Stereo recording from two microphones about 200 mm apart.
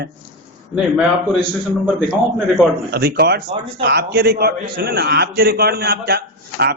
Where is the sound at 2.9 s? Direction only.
50° right (ahead or behind).